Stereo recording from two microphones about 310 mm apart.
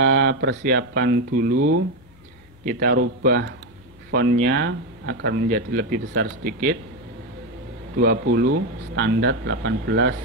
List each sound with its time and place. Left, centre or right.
0.1 s speech: right
8.0 s speech: right